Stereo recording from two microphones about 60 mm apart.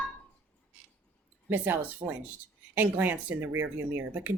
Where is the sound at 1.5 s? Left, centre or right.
Right.